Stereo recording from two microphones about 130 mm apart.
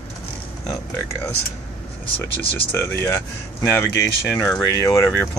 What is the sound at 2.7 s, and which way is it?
Speech, 25° left (ahead or behind).